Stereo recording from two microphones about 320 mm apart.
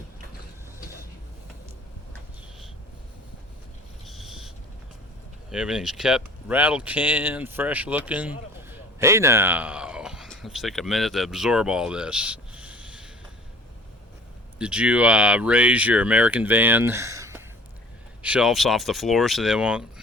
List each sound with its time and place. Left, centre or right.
4.0 s a sound: centre
5.5 s speech: centre
14.6 s speech: centre